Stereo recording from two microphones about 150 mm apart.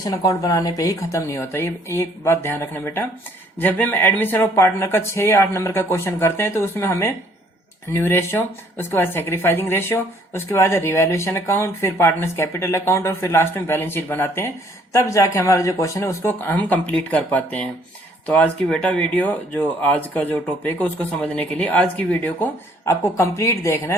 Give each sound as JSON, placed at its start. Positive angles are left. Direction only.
{"t": 0.0, "sound": "a woman's voice", "side_deg": 25}